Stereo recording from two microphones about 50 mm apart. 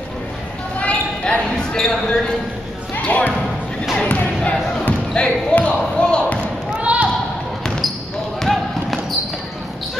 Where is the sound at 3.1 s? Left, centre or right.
Left.